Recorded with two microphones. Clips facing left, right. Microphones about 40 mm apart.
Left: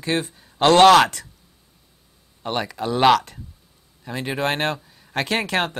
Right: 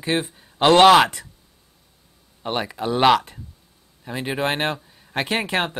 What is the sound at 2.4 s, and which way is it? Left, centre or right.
Speech, centre.